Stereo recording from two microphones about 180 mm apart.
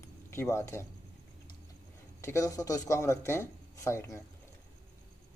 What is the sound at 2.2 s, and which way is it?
A man's voice, 15° left (ahead or behind).